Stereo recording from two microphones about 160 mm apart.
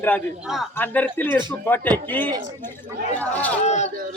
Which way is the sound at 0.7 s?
10° left (ahead or behind).